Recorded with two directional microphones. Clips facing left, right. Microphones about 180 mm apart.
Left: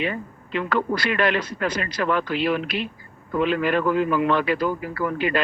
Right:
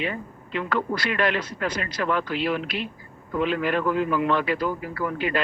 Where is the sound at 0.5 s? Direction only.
75° left (ahead or behind).